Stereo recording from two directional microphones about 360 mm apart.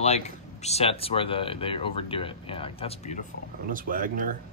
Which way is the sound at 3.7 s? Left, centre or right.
Right.